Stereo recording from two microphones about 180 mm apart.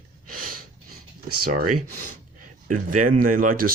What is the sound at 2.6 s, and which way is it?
Speech, 45° right (ahead or behind).